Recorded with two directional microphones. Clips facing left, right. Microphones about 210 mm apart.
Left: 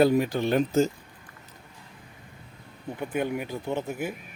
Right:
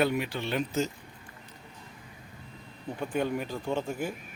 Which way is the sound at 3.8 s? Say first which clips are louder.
Left 1 dB; 10° left (ahead or behind).